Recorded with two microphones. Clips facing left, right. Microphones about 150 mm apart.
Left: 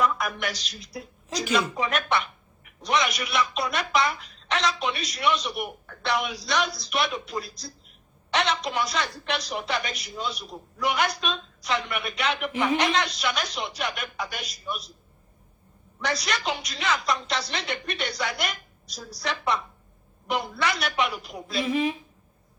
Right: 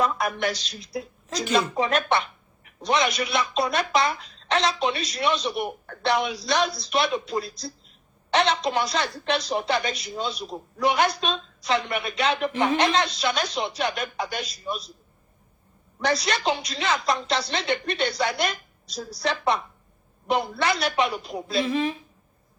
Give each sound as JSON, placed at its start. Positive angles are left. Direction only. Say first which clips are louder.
{"t": 0.0, "sound": "a woman's voice", "louder": "right 2 dB", "side_deg": -30}
{"t": 16.0, "sound": "a woman's voice", "louder": "right 4 dB", "side_deg": -30}